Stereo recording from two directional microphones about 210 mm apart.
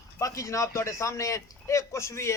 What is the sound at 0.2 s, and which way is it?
A man's voice, 15° left (ahead or behind).